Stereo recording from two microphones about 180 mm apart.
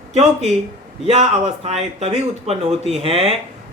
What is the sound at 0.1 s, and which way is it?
A man's voice, 35° right (ahead or behind).